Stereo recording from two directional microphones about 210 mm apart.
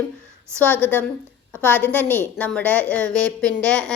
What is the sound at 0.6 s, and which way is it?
A woman's voice, 10° left (ahead or behind).